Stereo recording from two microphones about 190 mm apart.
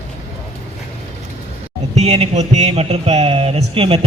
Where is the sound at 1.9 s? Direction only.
35° right (ahead or behind).